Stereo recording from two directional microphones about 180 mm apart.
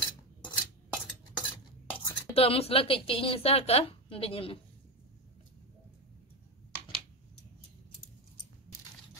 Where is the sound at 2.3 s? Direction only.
35° left (ahead or behind).